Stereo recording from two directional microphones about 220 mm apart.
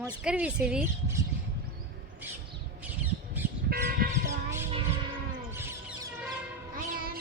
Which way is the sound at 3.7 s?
40° right (ahead or behind).